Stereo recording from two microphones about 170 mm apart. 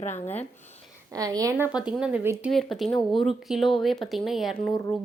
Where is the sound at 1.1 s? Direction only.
20° right (ahead or behind).